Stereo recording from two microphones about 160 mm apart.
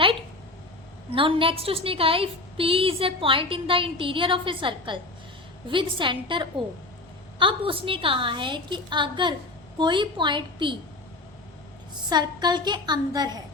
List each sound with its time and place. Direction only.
1.1 s a woman's voice: 35° right (ahead or behind)
12.0 s a woman's voice: 25° right (ahead or behind)